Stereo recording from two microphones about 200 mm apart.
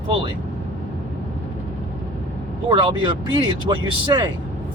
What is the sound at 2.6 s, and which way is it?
Speech, 25° right (ahead or behind).